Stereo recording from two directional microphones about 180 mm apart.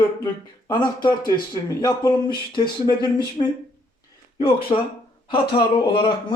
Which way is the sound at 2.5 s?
25° left (ahead or behind).